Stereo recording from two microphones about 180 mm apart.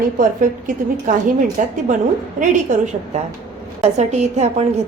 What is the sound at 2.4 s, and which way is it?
A woman's voice, 45° right (ahead or behind).